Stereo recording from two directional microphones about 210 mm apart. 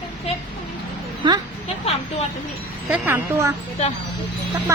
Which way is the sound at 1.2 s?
20° right (ahead or behind).